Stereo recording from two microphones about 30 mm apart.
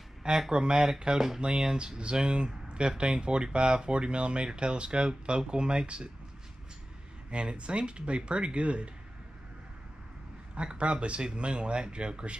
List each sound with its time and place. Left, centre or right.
0.5 s speech: right
7.2 s speech: right
10.5 s speech: right